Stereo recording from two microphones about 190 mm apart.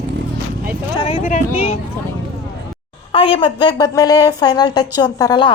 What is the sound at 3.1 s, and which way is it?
A woman's voice, 30° left (ahead or behind).